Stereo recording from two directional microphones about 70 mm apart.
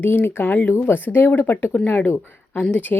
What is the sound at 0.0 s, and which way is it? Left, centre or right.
Speech, left.